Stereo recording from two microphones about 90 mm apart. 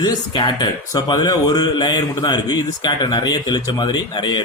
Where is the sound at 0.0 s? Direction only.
50° left (ahead or behind).